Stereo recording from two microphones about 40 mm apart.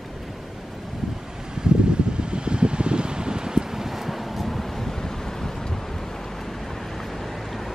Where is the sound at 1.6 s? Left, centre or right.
Right.